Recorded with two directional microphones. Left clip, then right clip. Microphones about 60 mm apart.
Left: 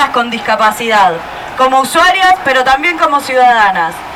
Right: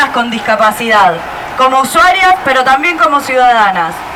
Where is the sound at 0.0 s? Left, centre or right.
Left.